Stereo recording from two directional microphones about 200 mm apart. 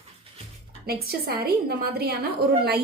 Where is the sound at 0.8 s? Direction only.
50° right (ahead or behind).